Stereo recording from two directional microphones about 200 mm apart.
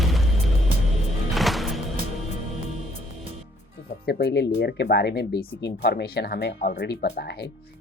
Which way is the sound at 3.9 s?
55° left (ahead or behind).